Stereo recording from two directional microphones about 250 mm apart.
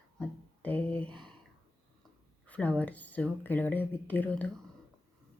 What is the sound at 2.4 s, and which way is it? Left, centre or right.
Speech, centre.